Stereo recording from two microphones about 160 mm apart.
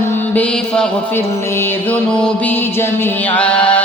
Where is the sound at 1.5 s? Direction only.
5° left (ahead or behind).